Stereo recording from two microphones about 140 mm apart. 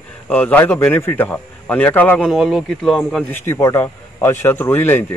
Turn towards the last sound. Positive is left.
turn(degrees=15)  # may be behind; listen again after turning